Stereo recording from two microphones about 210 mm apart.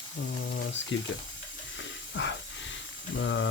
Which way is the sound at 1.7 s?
60° left (ahead or behind).